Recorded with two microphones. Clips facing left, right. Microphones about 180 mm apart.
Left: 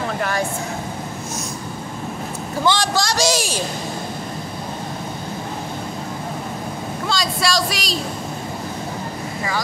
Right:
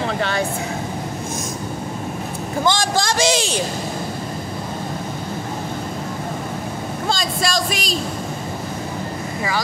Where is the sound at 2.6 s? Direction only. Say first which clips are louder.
Even; 50° right (ahead or behind).